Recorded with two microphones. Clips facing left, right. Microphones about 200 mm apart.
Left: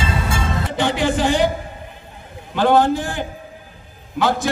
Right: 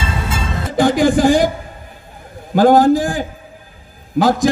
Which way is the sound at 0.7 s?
40° right (ahead or behind).